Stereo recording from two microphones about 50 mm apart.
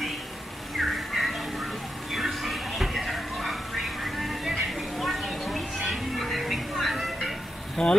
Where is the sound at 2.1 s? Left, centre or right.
Centre.